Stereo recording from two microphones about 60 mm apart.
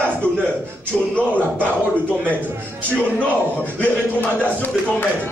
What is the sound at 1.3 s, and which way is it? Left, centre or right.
Speech, left.